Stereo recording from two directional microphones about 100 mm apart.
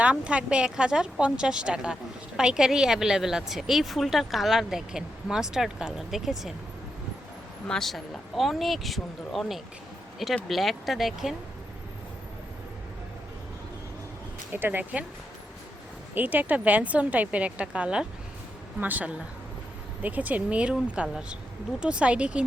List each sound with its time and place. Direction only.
0.0 s speech: 10° right (ahead or behind)
7.7 s speech: centre (ahead or behind)
14.5 s speech: 20° right (ahead or behind)
16.1 s a woman's voice: 15° right (ahead or behind)